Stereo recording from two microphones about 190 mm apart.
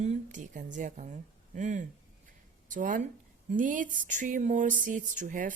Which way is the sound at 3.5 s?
45° right (ahead or behind).